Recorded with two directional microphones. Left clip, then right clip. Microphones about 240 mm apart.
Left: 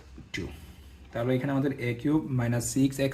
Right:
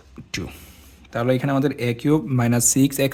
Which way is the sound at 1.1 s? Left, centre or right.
Right.